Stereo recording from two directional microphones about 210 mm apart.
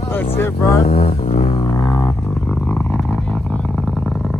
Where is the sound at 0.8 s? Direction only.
30° left (ahead or behind).